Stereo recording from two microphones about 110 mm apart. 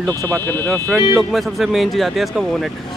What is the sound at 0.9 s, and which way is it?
Speech, centre (ahead or behind).